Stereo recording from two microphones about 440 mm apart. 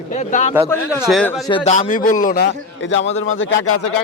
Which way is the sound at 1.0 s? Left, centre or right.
Centre.